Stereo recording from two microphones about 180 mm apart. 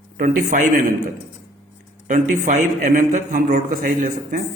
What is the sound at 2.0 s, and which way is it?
A man's voice, 45° right (ahead or behind).